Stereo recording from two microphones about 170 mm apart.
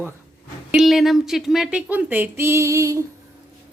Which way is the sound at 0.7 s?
Centre (ahead or behind).